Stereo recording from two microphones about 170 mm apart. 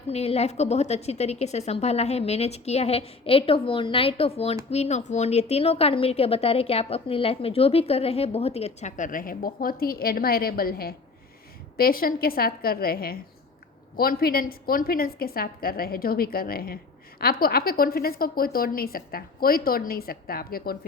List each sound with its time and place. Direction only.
0.1 s a woman's voice: 40° left (ahead or behind); by 20.7 s 60° left (ahead or behind)